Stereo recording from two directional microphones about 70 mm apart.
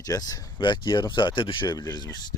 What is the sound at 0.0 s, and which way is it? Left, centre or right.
Speech, left.